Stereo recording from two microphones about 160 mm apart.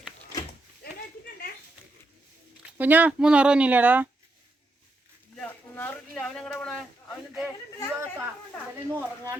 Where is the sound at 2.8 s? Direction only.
10° right (ahead or behind).